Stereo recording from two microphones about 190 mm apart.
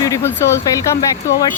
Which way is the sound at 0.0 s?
15° left (ahead or behind).